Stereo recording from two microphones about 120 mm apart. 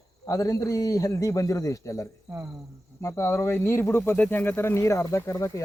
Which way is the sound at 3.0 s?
25° left (ahead or behind).